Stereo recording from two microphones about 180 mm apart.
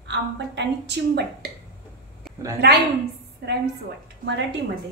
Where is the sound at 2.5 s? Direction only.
65° right (ahead or behind).